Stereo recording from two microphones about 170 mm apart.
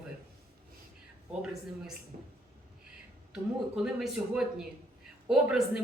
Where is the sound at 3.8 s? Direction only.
5° right (ahead or behind).